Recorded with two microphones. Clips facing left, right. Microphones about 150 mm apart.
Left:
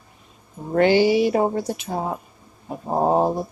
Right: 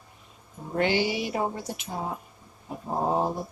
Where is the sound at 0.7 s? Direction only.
50° left (ahead or behind).